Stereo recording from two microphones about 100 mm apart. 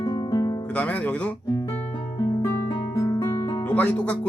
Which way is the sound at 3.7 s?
15° left (ahead or behind).